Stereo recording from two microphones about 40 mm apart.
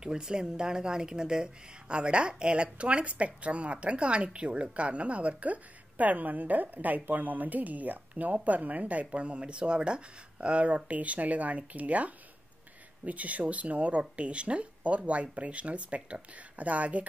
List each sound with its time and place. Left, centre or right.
0.0 s speech: centre; by 17.0 s right